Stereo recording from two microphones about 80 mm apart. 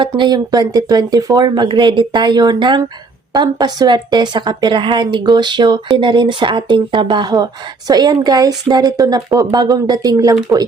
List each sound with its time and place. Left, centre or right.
0.0 s speech: right
0.3 s a woman's voice: right